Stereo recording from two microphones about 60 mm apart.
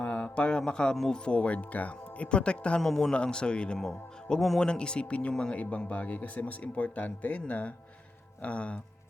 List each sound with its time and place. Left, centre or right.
0.0 s mantra: left
0.9 s speech: centre
4.6 s speech: centre